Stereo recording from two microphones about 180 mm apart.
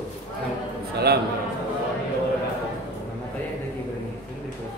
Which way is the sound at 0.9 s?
60° right (ahead or behind).